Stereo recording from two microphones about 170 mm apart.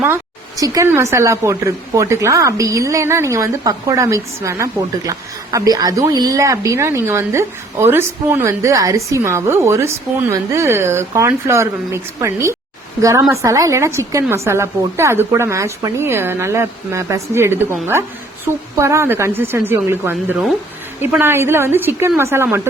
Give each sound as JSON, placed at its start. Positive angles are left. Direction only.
{"t": 0.0, "sound": "a woman's voice", "side_deg": -15}